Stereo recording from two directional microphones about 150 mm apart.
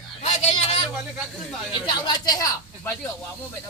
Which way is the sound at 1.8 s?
25° left (ahead or behind).